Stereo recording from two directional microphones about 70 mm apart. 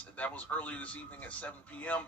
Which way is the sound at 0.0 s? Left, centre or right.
Centre.